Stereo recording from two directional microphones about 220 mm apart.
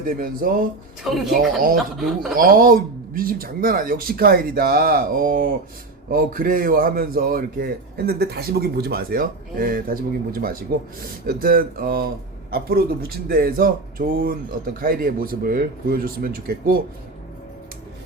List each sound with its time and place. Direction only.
0.0 s speech: 40° right (ahead or behind)
1.0 s speech: centre (ahead or behind)
2.3 s speech: 40° right (ahead or behind)